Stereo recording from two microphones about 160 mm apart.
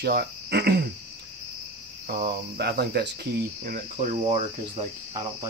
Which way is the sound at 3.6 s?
60° right (ahead or behind).